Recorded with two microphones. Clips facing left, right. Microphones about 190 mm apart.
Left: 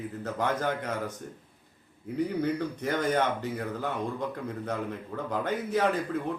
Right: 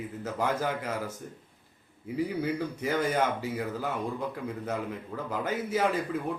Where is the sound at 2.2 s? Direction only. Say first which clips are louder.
Left 1 dB; 5° right (ahead or behind).